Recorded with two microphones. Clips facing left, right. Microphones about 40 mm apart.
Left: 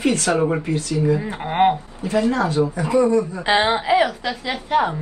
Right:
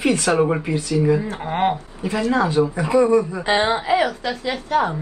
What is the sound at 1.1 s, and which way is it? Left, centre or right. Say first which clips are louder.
Speech: right 1 dB; left.